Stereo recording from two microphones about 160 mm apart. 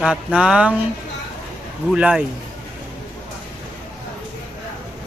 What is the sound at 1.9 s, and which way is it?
Speech, 5° right (ahead or behind).